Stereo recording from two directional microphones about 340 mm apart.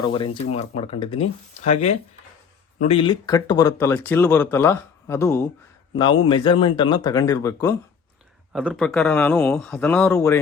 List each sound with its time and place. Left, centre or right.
0.0 s speech: centre
8.5 s speech: centre